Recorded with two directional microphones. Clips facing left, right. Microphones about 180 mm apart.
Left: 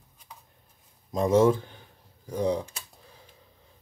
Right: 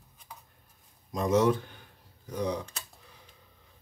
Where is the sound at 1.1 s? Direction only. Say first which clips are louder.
Left 4 dB; 30° left (ahead or behind).